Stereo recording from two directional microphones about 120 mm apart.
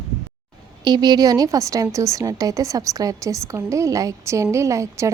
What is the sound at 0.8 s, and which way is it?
Speech, 35° right (ahead or behind).